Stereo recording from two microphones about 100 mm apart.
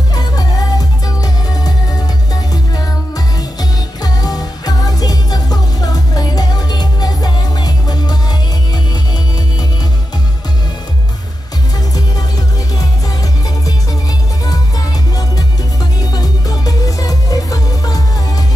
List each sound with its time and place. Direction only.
0.1 s music: 40° left (ahead or behind)
4.0 s music: 40° left (ahead or behind)
16.0 s music: 40° left (ahead or behind)